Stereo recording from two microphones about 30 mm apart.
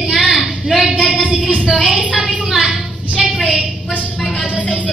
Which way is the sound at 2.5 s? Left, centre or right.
Centre.